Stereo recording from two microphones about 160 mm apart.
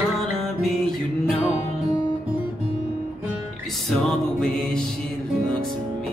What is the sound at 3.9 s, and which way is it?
Music, 5° left (ahead or behind).